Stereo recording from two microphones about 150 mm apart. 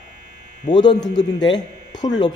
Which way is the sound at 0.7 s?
30° left (ahead or behind).